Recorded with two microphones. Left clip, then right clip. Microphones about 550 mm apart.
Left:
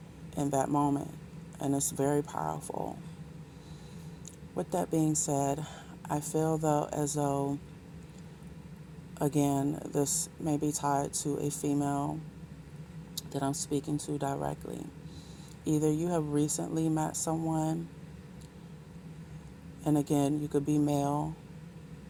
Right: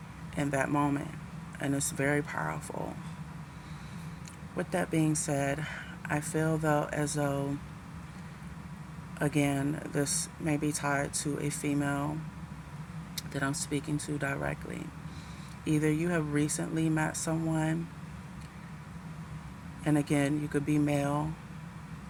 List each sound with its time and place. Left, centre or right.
0.3 s speech: left
4.5 s speech: left
9.1 s speech: left
11.8 s speech: left
13.1 s speech: left
15.6 s speech: left
19.8 s speech: left